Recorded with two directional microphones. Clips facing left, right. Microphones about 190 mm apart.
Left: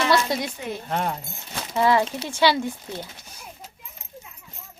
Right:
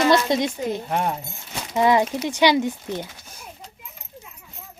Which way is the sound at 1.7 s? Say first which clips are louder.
Right 2 dB; 15° right (ahead or behind).